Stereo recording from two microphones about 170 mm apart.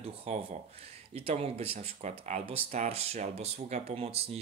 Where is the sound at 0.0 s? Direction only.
35° right (ahead or behind).